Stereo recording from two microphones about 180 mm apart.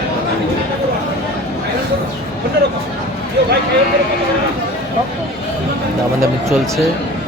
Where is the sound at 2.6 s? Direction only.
60° right (ahead or behind).